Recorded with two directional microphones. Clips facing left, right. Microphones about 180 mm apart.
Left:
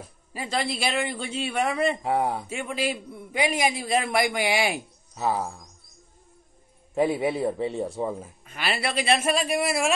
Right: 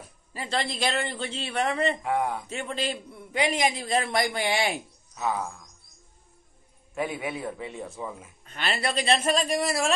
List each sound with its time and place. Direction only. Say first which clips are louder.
0.3 s a man's voice: left 2 dB; 10° left (ahead or behind)
2.0 s a man's voice: left 2 dB; 35° left (ahead or behind)
2.5 s a man's voice: left 2 dB; 10° left (ahead or behind)
5.1 s a man's voice: left 3 dB; 30° left (ahead or behind)
7.0 s a man's voice: left 7 dB; 35° left (ahead or behind)
8.5 s a man's voice: even; 10° left (ahead or behind)